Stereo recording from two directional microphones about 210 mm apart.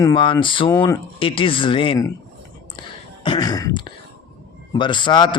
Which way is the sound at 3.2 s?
20° left (ahead or behind).